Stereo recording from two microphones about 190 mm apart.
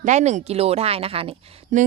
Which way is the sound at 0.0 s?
35° right (ahead or behind).